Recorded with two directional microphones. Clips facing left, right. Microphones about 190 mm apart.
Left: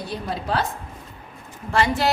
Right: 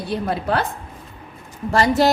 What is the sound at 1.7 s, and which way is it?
Speech, 40° right (ahead or behind).